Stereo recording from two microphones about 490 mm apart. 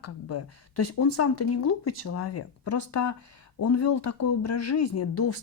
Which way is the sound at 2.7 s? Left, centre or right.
Left.